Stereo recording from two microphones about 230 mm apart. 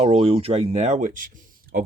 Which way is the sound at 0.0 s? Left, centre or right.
Right.